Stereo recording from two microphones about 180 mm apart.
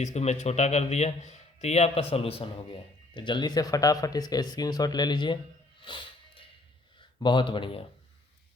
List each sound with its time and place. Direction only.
0.0 s a man's voice: 40° left (ahead or behind)
5.8 s music: 30° left (ahead or behind)
7.2 s speech: 25° left (ahead or behind)